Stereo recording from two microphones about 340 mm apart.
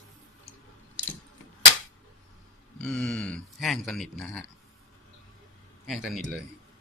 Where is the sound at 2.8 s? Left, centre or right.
Centre.